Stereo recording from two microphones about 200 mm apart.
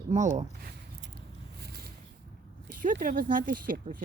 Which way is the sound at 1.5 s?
50° right (ahead or behind).